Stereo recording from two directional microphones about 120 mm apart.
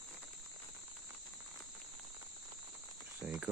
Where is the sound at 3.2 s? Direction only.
5° right (ahead or behind).